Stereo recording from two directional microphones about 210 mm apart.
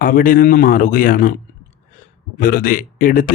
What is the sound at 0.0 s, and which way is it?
Speech, 40° left (ahead or behind).